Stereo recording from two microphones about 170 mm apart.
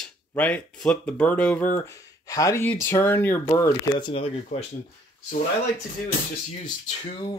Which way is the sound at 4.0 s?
35° left (ahead or behind).